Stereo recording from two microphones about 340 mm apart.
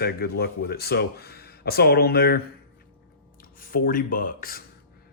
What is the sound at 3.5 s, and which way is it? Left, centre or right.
Speech, left.